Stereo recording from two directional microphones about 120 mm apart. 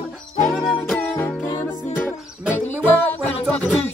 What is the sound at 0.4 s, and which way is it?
Music, centre (ahead or behind).